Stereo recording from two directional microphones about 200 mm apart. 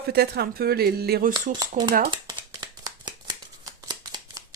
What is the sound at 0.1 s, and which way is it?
Speech, 50° right (ahead or behind).